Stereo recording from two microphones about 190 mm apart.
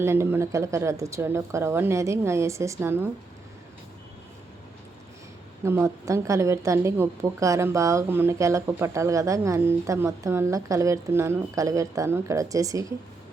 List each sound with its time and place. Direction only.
0.0 s a woman's voice: 15° right (ahead or behind)
5.6 s a woman's voice: 15° right (ahead or behind)